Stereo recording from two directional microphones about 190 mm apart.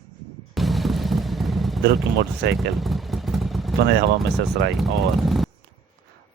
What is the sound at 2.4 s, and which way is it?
Speech, 60° right (ahead or behind).